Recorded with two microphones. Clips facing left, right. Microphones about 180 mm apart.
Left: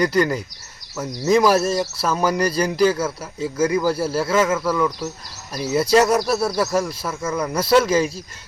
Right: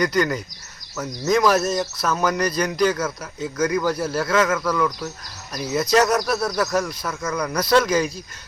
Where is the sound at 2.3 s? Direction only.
30° left (ahead or behind).